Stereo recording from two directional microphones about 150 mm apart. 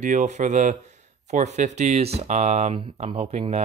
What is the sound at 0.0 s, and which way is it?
Speech, 55° right (ahead or behind).